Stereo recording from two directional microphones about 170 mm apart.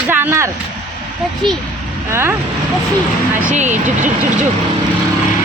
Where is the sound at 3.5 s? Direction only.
45° right (ahead or behind).